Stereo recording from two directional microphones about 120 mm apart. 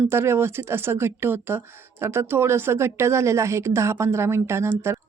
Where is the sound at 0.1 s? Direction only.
20° right (ahead or behind).